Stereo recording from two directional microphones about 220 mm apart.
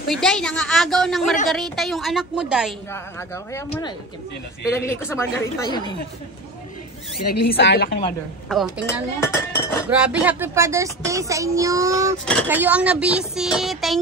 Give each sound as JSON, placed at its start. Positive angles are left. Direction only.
{"t": 0.1, "sound": "speech", "side_deg": 0}
{"t": 2.9, "sound": "a woman's voice", "side_deg": 10}
{"t": 4.6, "sound": "a woman's voice", "side_deg": 10}
{"t": 7.4, "sound": "a woman's voice", "side_deg": 45}
{"t": 8.5, "sound": "speech", "side_deg": 0}
{"t": 8.8, "sound": "speech", "side_deg": 10}
{"t": 9.8, "sound": "speech", "side_deg": -5}